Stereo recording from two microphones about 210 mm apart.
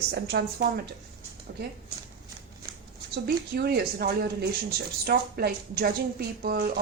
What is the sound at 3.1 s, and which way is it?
A woman's voice, 50° right (ahead or behind).